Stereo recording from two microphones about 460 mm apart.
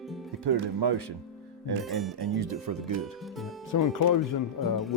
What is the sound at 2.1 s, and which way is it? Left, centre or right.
Speech, right.